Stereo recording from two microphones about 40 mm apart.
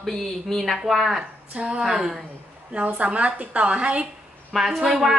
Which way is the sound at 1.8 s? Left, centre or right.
Centre.